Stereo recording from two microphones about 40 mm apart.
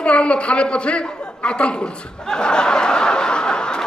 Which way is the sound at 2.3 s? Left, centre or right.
Centre.